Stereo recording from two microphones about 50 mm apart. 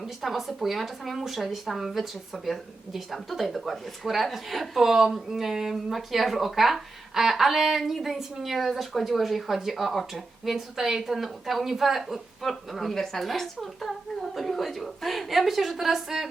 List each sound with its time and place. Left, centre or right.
0.0 s speech: centre